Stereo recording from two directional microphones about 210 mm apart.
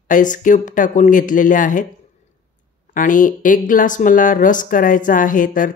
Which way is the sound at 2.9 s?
40° left (ahead or behind).